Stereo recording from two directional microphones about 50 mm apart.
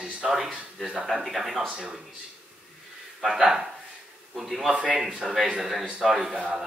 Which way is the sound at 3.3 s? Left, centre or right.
Centre.